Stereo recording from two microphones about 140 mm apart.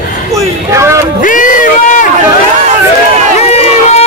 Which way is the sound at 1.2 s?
70° left (ahead or behind).